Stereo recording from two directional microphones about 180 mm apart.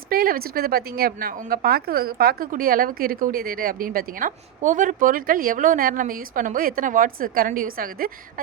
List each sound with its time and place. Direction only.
0.1 s a woman's voice: 55° right (ahead or behind)